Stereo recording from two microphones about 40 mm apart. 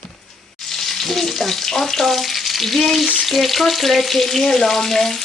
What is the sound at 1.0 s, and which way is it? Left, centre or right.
Frying, centre.